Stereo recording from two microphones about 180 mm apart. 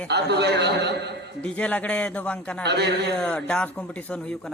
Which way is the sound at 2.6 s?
65° right (ahead or behind).